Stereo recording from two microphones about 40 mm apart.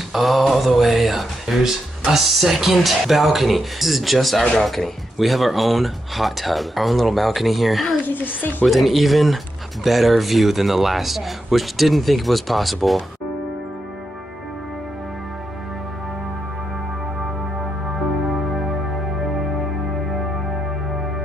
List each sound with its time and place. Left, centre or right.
0.1 s speech: centre
8.1 s a woman's voice: left
8.6 s speech: centre